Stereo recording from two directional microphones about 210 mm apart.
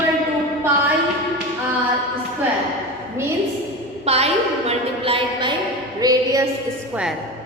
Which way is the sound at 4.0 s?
30° right (ahead or behind).